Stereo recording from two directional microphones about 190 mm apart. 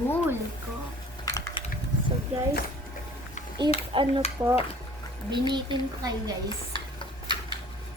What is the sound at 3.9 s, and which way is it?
Speech, 25° right (ahead or behind).